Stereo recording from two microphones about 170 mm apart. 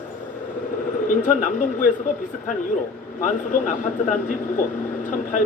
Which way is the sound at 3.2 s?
50° left (ahead or behind).